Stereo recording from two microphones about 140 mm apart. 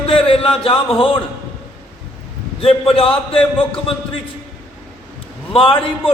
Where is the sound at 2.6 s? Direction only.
40° left (ahead or behind).